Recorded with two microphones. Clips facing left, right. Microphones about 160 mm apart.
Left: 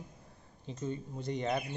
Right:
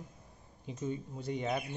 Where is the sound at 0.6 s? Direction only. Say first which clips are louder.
Even; 10° right (ahead or behind).